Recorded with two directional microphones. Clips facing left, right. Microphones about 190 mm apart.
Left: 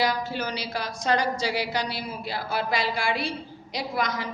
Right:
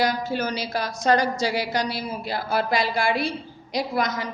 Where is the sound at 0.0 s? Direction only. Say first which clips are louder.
Right 3 dB; 45° right (ahead or behind).